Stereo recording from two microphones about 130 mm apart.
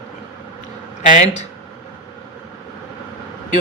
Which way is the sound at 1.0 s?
75° left (ahead or behind).